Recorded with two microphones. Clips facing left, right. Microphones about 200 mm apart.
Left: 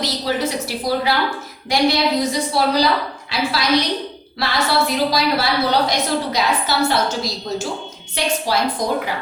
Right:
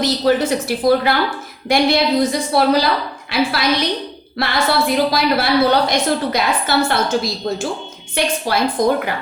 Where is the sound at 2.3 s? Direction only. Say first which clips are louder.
Right 4 dB; 55° right (ahead or behind).